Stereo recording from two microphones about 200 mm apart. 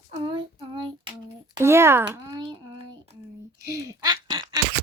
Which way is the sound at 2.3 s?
20° right (ahead or behind).